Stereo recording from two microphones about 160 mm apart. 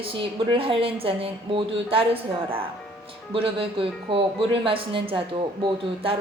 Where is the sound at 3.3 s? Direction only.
35° right (ahead or behind).